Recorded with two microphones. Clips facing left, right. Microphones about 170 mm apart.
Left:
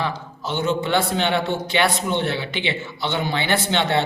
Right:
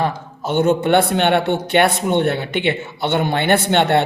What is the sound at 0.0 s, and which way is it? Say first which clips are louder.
A man's voice: right 5 dB; 50° right (ahead or behind).